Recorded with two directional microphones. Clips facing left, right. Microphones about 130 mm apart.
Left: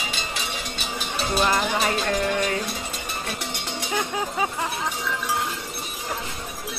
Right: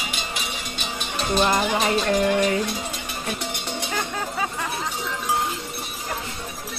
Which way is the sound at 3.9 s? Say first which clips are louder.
Left 4 dB; 10° left (ahead or behind).